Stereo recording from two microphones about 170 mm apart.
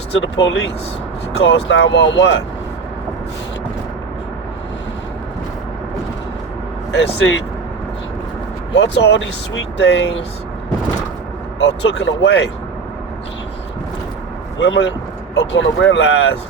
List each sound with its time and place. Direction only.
0.2 s speech: 90° left
6.9 s speech: 90° left
8.7 s speech: 90° left
11.6 s speech: 90° left
14.6 s speech: 90° left